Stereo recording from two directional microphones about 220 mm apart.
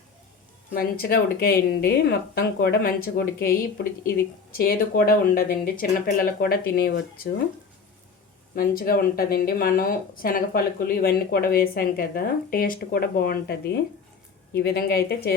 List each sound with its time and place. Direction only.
0.7 s speech: 40° left (ahead or behind)
8.5 s speech: 40° left (ahead or behind)